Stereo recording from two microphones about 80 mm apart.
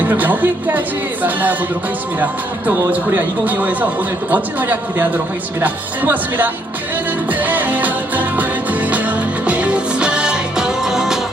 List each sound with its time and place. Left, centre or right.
0.0 s speech: right
2.9 s speech: right
7.3 s music: right